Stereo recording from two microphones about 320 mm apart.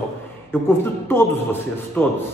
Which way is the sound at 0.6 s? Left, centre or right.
Centre.